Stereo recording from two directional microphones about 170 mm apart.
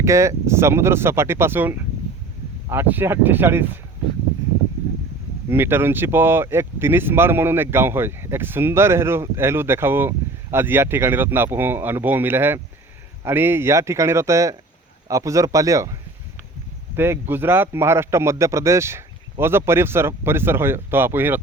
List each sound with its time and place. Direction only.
0.0 s speech: 15° right (ahead or behind)
5.5 s speech: 15° right (ahead or behind)